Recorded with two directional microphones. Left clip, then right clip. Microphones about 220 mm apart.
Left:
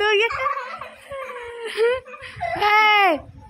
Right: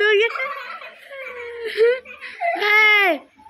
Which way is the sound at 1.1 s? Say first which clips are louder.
Even; 15° left (ahead or behind).